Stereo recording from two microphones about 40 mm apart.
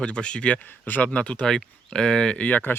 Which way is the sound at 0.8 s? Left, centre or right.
Left.